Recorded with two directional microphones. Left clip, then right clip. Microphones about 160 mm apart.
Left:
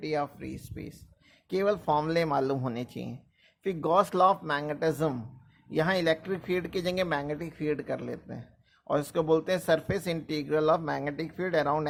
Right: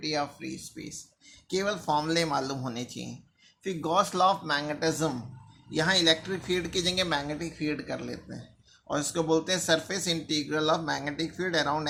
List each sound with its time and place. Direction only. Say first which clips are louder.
0.0 s speech: even; 50° left (ahead or behind)